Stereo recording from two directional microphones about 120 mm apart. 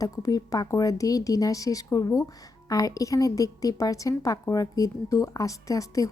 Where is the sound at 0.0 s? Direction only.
30° left (ahead or behind).